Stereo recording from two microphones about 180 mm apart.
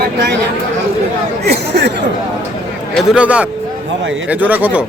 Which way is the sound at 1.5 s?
70° right (ahead or behind).